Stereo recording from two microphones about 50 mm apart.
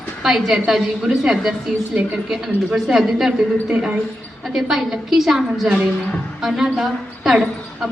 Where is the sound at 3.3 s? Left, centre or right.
Right.